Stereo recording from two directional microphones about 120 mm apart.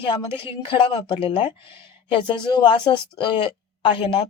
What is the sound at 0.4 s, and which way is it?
Speech, 50° left (ahead or behind).